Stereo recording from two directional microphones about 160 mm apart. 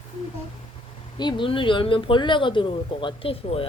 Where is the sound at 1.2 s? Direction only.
30° left (ahead or behind).